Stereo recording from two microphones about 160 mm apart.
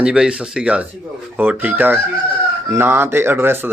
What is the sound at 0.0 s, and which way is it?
Speech, 5° right (ahead or behind).